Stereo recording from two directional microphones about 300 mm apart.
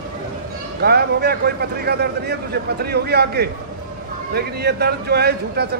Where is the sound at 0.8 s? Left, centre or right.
Right.